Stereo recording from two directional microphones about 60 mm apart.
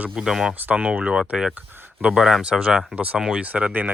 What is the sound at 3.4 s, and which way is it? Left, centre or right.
Speech, right.